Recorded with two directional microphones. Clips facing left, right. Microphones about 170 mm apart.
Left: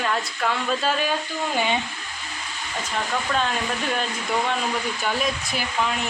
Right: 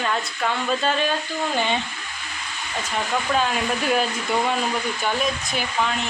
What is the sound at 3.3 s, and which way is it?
Speech, 5° right (ahead or behind).